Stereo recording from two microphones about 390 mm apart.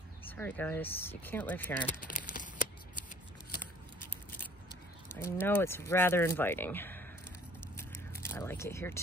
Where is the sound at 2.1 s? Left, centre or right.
Left.